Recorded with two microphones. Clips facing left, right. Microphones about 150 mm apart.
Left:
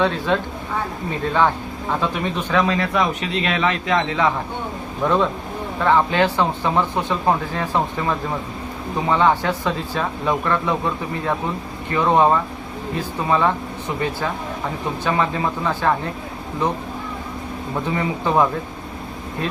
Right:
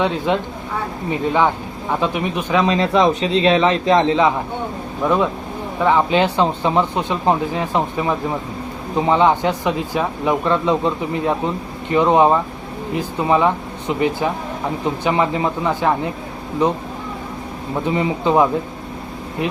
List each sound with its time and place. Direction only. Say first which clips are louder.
0.0 s speech: right 1 dB; 15° right (ahead or behind)
5.0 s speech: right 1 dB; 10° right (ahead or behind)
17.8 s speech: right 4 dB; 20° right (ahead or behind)